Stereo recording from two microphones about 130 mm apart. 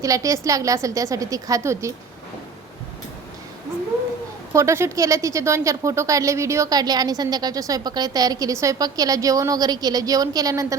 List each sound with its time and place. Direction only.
0.0 s speech: 25° right (ahead or behind)
4.5 s speech: 20° right (ahead or behind)